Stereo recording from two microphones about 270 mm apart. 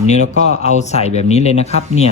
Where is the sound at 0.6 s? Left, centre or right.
Left.